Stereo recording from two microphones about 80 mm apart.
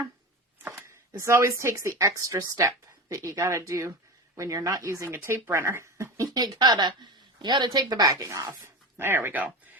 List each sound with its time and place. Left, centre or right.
0.7 s speech: right
6.4 s a woman's voice: right
9.0 s speech: right